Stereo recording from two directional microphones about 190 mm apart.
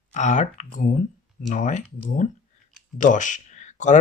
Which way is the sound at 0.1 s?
40° left (ahead or behind).